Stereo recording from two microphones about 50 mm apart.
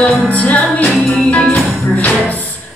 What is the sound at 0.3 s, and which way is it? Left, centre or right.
Music, left.